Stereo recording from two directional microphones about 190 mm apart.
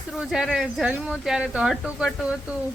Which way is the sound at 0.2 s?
Centre (ahead or behind).